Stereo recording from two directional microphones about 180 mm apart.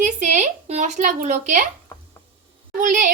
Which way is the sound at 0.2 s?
40° right (ahead or behind).